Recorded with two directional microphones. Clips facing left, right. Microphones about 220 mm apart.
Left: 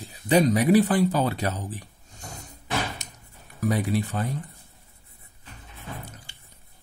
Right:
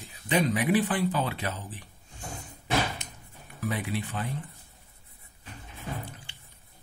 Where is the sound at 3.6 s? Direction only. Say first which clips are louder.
Left 7 dB; 40° left (ahead or behind).